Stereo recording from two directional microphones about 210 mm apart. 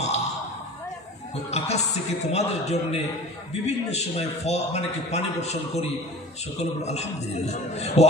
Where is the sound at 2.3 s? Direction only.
30° left (ahead or behind).